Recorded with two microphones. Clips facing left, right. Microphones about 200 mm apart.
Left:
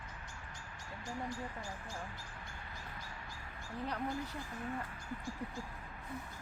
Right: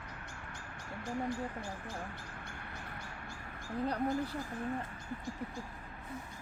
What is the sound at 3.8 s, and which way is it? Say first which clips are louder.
Speech: right 6 dB; 35° right (ahead or behind).